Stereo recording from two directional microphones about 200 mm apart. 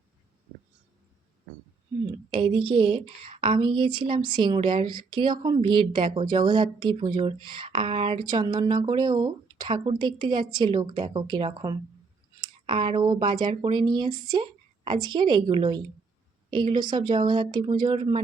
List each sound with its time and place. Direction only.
2.3 s a woman's voice: 25° right (ahead or behind)